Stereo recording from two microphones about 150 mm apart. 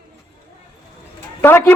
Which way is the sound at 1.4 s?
15° left (ahead or behind).